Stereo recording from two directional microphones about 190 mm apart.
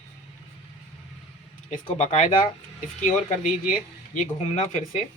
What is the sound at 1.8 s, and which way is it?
Speech, 35° left (ahead or behind).